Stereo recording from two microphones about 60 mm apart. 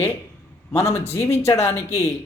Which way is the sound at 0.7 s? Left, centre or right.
Left.